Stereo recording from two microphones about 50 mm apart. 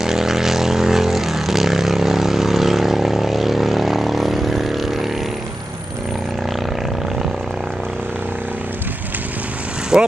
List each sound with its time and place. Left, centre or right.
0.0 s vehicle: centre
9.9 s vehicle: centre